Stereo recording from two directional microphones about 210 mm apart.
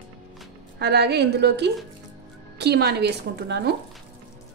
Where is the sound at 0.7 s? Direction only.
50° right (ahead or behind).